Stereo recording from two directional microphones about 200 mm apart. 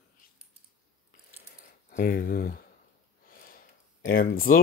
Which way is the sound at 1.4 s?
45° left (ahead or behind).